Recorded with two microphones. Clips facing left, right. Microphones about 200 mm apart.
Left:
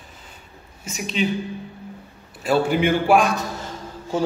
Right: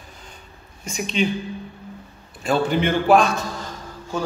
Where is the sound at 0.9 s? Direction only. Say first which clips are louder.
Right 2 dB; 5° left (ahead or behind).